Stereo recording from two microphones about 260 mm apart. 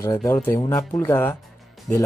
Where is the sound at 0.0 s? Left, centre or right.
Centre.